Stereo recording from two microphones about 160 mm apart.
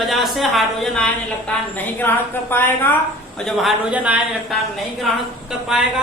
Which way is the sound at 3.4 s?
Centre (ahead or behind).